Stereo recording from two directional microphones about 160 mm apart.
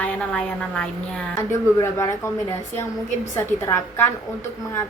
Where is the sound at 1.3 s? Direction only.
20° left (ahead or behind).